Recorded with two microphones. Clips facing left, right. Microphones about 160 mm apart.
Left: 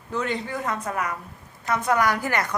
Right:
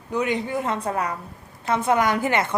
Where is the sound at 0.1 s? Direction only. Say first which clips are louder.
Right 4 dB; 15° right (ahead or behind).